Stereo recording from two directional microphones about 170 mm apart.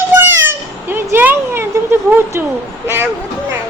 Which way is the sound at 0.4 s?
10° right (ahead or behind).